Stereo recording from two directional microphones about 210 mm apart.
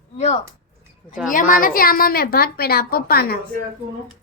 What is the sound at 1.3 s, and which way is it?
A woman's voice, 40° left (ahead or behind).